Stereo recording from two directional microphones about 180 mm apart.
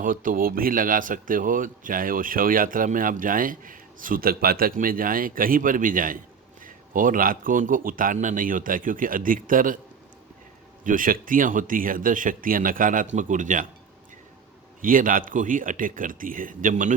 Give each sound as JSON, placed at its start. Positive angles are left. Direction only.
{"t": 0.0, "sound": "speech", "side_deg": -50}
{"t": 10.8, "sound": "speech", "side_deg": -50}
{"t": 14.8, "sound": "speech", "side_deg": -50}